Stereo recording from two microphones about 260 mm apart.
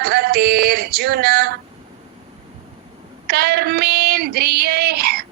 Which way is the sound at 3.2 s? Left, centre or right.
Right.